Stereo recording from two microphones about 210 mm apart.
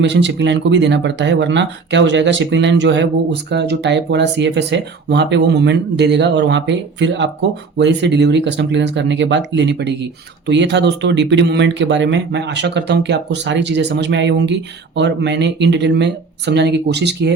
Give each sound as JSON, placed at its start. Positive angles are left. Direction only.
{"t": 0.1, "sound": "speech", "side_deg": -55}